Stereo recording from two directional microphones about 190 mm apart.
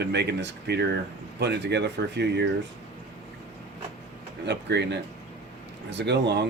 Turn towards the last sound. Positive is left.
turn(degrees=-65)  # may be behind; listen again after turning